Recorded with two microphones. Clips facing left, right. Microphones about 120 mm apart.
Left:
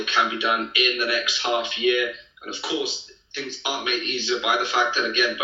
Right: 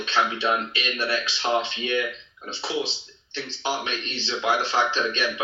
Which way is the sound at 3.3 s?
30° right (ahead or behind).